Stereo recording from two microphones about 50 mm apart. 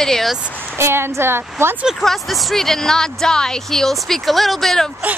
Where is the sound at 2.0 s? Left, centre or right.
Centre.